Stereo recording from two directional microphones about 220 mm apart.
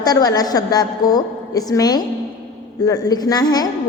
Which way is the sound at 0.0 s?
15° left (ahead or behind).